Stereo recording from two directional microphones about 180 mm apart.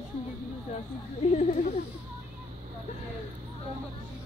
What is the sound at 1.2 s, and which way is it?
Speech, 40° left (ahead or behind).